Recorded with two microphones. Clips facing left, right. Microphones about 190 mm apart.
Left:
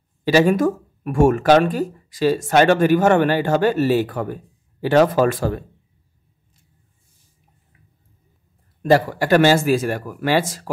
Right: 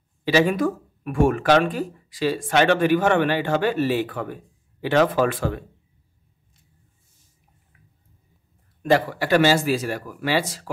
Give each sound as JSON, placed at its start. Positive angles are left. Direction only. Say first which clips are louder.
{"t": 0.2, "sound": "speech", "louder": "left 4 dB", "side_deg": 45}
{"t": 8.8, "sound": "speech", "louder": "left 4 dB", "side_deg": 40}